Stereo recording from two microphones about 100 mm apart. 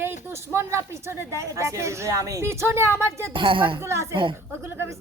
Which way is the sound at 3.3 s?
55° right (ahead or behind).